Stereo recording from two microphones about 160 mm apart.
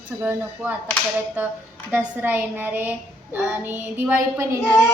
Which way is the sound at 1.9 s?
10° right (ahead or behind).